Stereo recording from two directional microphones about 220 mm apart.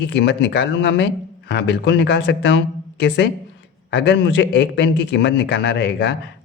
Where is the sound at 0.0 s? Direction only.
50° left (ahead or behind).